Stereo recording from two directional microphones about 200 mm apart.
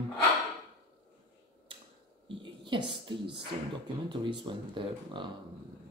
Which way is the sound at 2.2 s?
25° right (ahead or behind).